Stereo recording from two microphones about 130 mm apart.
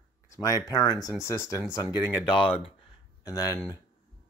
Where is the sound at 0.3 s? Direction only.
25° left (ahead or behind).